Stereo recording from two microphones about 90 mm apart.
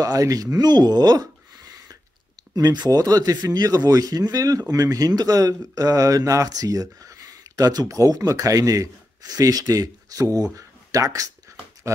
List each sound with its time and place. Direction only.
0.0 s speech: 40° right (ahead or behind)